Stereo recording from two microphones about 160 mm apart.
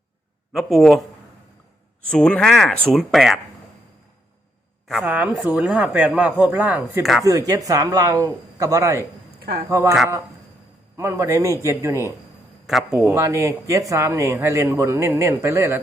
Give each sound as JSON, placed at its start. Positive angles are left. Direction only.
{"t": 0.5, "sound": "speech", "side_deg": 0}
{"t": 2.0, "sound": "speech", "side_deg": 5}
{"t": 4.9, "sound": "speech", "side_deg": -10}
{"t": 7.0, "sound": "speech", "side_deg": 0}
{"t": 7.3, "sound": "speech", "side_deg": -20}
{"t": 9.4, "sound": "speech", "side_deg": -70}
{"t": 9.6, "sound": "speech", "side_deg": -15}
{"t": 10.9, "sound": "speech", "side_deg": -20}
{"t": 12.6, "sound": "speech", "side_deg": 0}
{"t": 13.1, "sound": "speech", "side_deg": -20}